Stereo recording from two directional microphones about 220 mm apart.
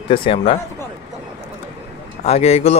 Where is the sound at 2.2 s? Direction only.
30° left (ahead or behind).